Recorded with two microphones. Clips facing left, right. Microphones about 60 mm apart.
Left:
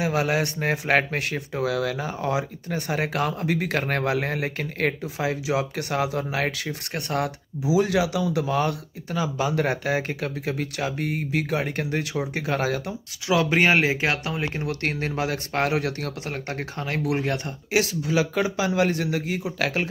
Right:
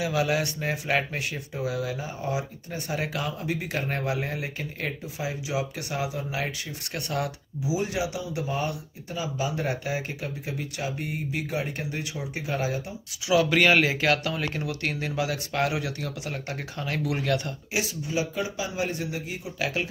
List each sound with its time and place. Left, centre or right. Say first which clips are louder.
0.0 s speech: left 2 dB; left
6.9 s speech: left 3 dB; left
7.7 s speech: left 7 dB; left
13.3 s speech: left 1 dB; left
14.7 s speech: left 3 dB; left
17.7 s speech: left 6 dB; left